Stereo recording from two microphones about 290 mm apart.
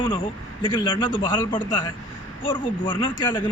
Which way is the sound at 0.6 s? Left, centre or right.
Centre.